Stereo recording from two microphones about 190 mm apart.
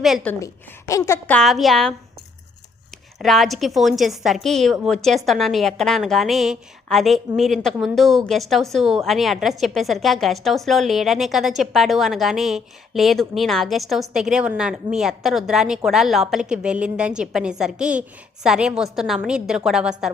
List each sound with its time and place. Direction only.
0.0 s a woman's voice: centre (ahead or behind)
0.3 s a woman's voice: 15° left (ahead or behind)
1.4 s a woman's voice: centre (ahead or behind)
3.2 s a woman's voice: centre (ahead or behind)